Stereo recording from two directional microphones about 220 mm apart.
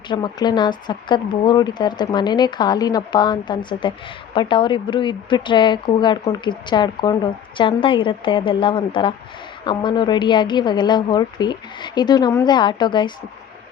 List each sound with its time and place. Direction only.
0.1 s a woman's voice: 20° left (ahead or behind)